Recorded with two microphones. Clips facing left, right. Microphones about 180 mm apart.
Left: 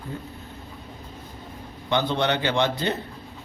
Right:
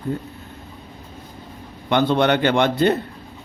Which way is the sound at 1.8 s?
55° right (ahead or behind).